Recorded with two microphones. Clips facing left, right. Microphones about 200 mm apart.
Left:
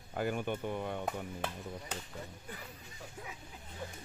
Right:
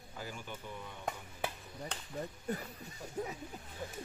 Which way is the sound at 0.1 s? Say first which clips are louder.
Left 11 dB; 60° left (ahead or behind).